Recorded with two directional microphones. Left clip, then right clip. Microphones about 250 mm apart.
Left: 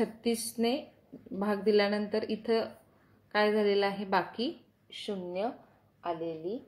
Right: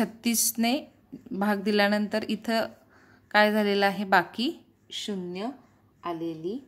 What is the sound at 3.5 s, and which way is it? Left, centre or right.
Speech, right.